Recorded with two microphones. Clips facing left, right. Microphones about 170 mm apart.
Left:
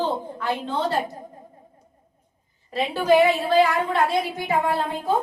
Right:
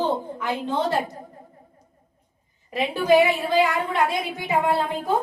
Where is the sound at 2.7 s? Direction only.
15° right (ahead or behind).